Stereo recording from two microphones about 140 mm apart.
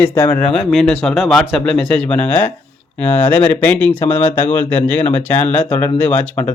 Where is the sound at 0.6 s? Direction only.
Centre (ahead or behind).